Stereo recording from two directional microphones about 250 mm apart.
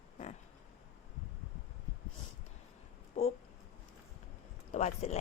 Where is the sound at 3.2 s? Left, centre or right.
Left.